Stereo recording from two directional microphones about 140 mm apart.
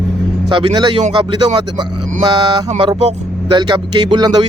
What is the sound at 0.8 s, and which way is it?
Speech, 35° right (ahead or behind).